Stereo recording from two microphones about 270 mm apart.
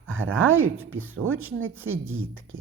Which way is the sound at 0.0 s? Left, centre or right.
Right.